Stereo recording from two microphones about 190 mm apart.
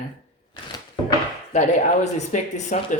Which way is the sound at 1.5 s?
40° left (ahead or behind).